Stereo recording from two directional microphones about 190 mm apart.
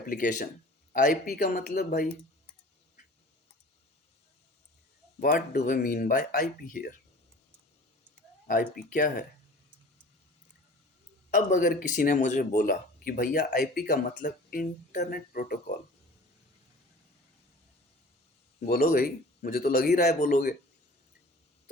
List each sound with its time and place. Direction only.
0.0 s speech: 45° left (ahead or behind)
5.2 s speech: 50° left (ahead or behind)
8.4 s speech: 50° left (ahead or behind)
11.3 s speech: 45° left (ahead or behind)
18.6 s speech: 50° left (ahead or behind)